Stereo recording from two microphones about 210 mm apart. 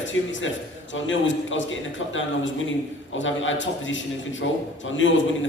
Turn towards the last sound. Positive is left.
turn(degrees=65)  # may be behind; listen again after turning